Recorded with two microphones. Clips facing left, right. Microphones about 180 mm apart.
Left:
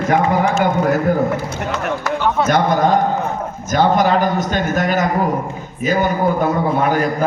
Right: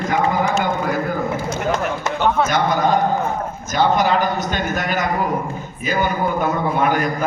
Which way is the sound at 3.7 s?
45° left (ahead or behind).